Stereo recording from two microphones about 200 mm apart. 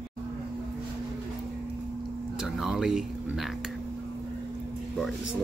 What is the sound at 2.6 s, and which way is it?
Speech, centre (ahead or behind).